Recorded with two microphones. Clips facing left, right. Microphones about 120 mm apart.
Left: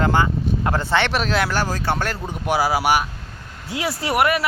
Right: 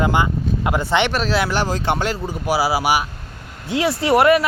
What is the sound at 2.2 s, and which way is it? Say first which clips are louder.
Speech: right 1 dB; 5° right (ahead or behind).